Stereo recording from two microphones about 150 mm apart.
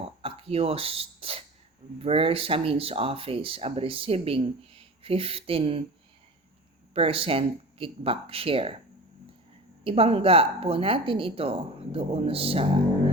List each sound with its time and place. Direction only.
0.0 s a sound: 40° right (ahead or behind)
2.0 s speech: 40° right (ahead or behind)
6.9 s speech: 40° right (ahead or behind)
9.8 s speech: 40° right (ahead or behind)